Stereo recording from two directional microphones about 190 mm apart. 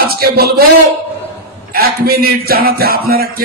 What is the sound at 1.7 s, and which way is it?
A man's voice, 50° right (ahead or behind).